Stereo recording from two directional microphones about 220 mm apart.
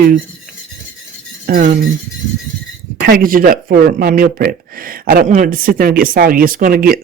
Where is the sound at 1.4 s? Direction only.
40° right (ahead or behind).